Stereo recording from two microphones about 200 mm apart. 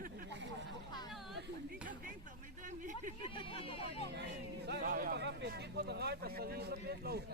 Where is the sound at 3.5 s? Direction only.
25° left (ahead or behind).